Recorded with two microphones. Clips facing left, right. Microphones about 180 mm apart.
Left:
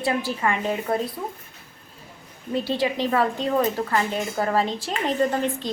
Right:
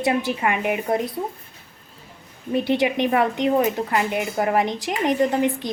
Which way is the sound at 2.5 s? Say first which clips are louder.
Right 4 dB; 20° right (ahead or behind).